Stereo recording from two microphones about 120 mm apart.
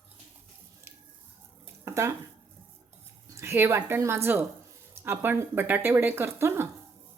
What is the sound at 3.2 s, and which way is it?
A woman's voice, 20° right (ahead or behind).